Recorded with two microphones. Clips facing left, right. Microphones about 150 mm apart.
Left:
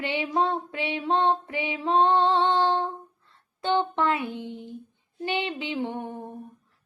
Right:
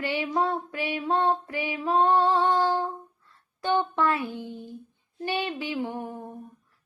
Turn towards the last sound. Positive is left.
turn(degrees=25)  # may be behind; listen again after turning